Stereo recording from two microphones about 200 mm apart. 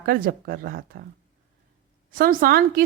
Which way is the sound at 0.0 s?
45° right (ahead or behind).